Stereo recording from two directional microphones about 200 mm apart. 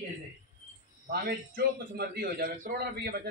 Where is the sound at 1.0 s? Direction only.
50° right (ahead or behind).